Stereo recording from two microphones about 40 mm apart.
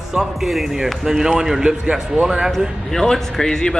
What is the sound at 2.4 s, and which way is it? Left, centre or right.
A man's voice, centre.